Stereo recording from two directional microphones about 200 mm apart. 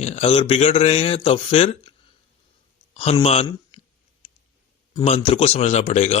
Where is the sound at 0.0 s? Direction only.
30° left (ahead or behind).